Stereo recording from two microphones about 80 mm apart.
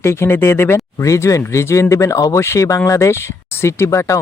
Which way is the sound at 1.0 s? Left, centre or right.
Left.